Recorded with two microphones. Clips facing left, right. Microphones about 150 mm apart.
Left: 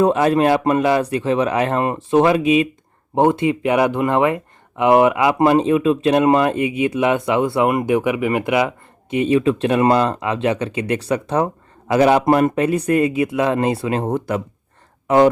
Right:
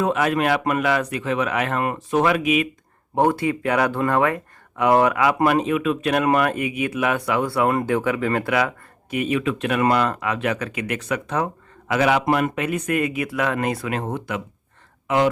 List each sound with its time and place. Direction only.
0.0 s speech: 30° left (ahead or behind)